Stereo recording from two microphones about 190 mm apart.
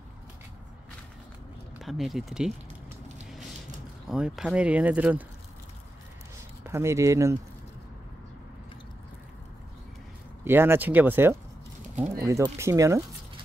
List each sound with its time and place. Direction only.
1.8 s speech: centre (ahead or behind)
4.1 s speech: centre (ahead or behind)
6.6 s speech: 15° right (ahead or behind)
10.4 s speech: 10° right (ahead or behind)